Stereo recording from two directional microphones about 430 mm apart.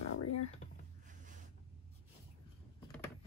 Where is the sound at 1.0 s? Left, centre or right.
Centre.